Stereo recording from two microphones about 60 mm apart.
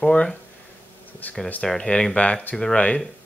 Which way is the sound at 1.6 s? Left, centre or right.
Centre.